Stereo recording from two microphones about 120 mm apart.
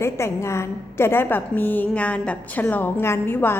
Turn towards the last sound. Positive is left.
turn(degrees=15)  # may be behind; listen again after turning